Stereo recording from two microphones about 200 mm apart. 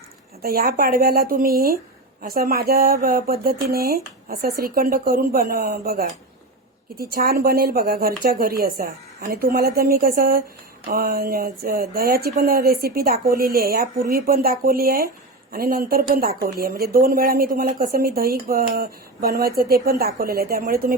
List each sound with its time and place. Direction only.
0.4 s a woman's voice: 50° right (ahead or behind)